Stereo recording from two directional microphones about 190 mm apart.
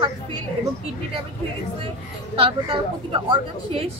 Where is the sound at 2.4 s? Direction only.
25° right (ahead or behind).